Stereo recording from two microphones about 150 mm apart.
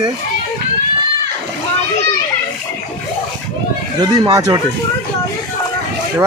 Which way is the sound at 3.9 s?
25° right (ahead or behind).